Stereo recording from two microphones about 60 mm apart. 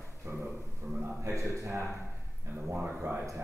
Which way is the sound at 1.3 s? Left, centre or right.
Right.